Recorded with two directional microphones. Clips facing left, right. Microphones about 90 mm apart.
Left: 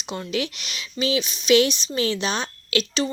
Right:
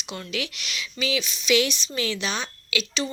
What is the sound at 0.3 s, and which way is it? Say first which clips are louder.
A woman's voice: left 5 dB; 35° left (ahead or behind).